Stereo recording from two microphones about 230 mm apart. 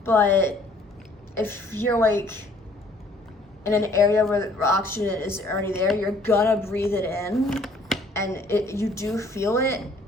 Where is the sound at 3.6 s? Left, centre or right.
Centre.